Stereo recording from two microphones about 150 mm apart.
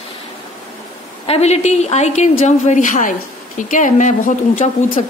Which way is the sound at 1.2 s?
45° left (ahead or behind).